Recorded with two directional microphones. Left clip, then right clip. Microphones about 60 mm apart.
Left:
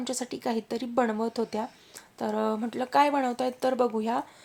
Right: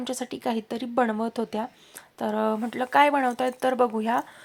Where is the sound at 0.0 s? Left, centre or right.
Right.